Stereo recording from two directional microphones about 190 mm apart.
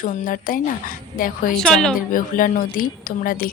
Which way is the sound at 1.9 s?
45° left (ahead or behind).